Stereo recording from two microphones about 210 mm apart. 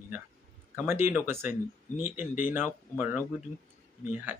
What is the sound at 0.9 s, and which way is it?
Speech, 10° right (ahead or behind).